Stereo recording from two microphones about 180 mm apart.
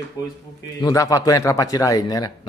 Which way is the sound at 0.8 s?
20° left (ahead or behind).